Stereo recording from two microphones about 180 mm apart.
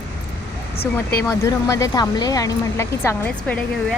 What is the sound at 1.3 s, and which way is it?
Speech, 15° left (ahead or behind).